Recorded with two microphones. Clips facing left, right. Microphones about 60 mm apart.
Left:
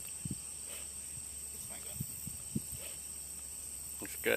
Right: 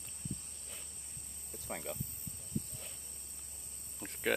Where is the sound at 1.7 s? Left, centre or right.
Right.